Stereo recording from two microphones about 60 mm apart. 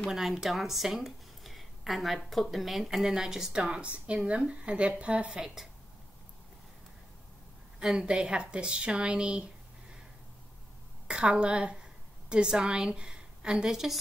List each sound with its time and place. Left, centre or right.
0.1 s speech: centre
7.8 s a woman's voice: centre
11.1 s a woman's voice: centre